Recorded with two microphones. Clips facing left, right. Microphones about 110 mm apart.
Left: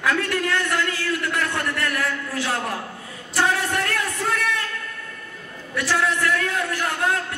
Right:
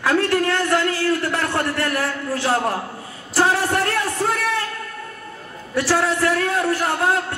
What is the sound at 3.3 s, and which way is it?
Music, 30° right (ahead or behind).